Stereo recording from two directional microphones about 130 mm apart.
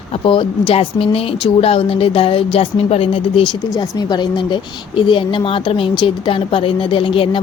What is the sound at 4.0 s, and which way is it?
Speech, 35° left (ahead or behind).